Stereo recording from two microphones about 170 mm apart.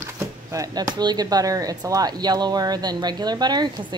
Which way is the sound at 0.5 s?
20° right (ahead or behind).